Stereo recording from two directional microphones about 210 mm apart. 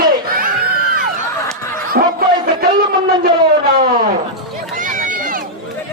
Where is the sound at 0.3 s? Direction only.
45° right (ahead or behind).